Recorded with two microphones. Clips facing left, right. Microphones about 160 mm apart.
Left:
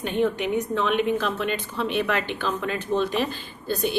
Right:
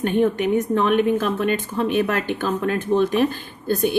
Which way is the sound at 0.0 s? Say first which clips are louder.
Right 5 dB; 50° right (ahead or behind).